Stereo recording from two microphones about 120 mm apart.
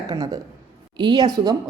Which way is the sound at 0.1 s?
30° right (ahead or behind).